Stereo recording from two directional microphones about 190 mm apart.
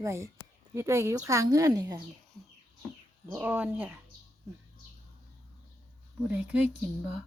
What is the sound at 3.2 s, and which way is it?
Speech, 10° right (ahead or behind).